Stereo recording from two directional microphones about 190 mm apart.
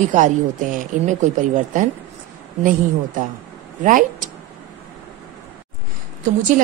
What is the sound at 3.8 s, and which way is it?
Speech, 45° right (ahead or behind).